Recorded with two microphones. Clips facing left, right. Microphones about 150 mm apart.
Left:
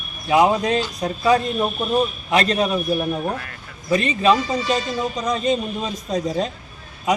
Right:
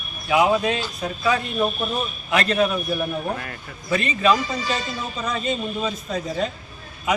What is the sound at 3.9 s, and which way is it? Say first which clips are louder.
Speech: left 3 dB; 35° left (ahead or behind).